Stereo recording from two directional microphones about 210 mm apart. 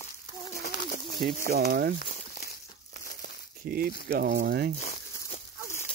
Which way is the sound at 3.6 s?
45° right (ahead or behind).